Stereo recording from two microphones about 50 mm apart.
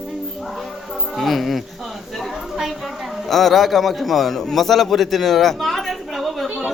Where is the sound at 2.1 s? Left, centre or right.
Centre.